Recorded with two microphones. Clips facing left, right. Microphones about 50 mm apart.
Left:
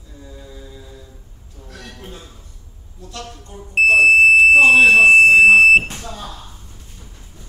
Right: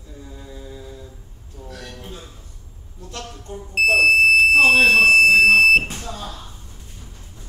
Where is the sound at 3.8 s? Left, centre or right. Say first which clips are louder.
Left 4 dB; centre.